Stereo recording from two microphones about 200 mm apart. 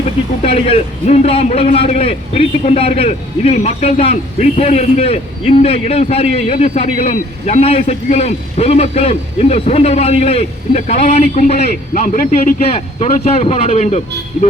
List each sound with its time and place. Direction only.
0.4 s a man's voice: 30° left (ahead or behind)
11.5 s a man's voice: 50° left (ahead or behind)
12.6 s a man's voice: 30° left (ahead or behind)